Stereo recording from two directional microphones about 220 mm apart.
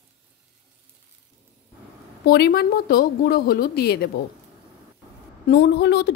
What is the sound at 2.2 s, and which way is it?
Speech, 45° left (ahead or behind).